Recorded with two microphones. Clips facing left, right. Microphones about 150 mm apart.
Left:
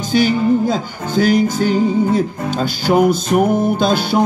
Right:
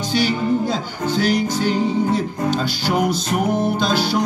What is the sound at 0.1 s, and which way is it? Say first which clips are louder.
Music: left 5 dB; 50° left (ahead or behind).